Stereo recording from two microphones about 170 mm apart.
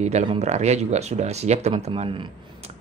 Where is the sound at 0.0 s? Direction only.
40° right (ahead or behind).